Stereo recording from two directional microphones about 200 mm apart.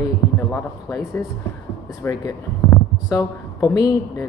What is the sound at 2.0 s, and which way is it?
Speech, 15° left (ahead or behind).